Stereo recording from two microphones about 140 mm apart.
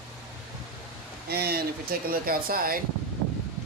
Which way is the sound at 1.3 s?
90° right.